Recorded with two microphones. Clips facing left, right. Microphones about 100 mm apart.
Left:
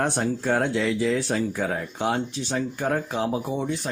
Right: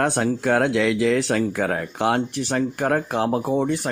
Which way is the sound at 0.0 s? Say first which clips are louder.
Right 4 dB; 85° right.